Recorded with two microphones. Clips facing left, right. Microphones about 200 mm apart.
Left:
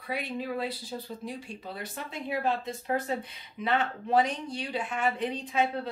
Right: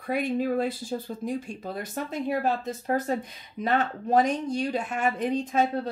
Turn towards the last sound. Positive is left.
turn(degrees=-45)  # may be behind; listen again after turning